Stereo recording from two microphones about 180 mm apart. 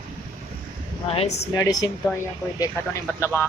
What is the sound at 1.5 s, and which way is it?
A woman's voice, 20° left (ahead or behind).